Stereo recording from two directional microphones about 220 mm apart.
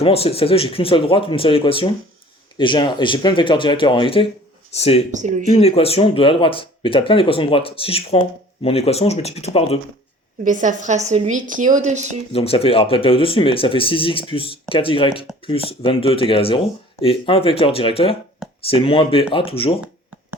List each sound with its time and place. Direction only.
0.0 s speech: 25° left (ahead or behind)
5.1 s a woman's voice: 35° right (ahead or behind)
5.5 s speech: 25° left (ahead or behind)
10.4 s a woman's voice: 35° right (ahead or behind)
12.3 s speech: 25° left (ahead or behind)